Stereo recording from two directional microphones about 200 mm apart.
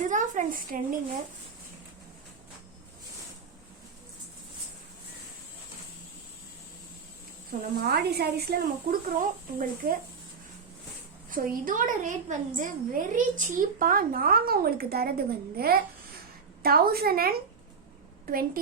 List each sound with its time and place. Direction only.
0.1 s a woman's voice: 40° right (ahead or behind)
7.9 s a woman's voice: 55° right (ahead or behind)
11.3 s a woman's voice: 45° right (ahead or behind)